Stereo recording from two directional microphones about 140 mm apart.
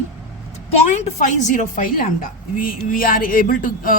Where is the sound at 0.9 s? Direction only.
55° left (ahead or behind); by 2.0 s 70° left (ahead or behind).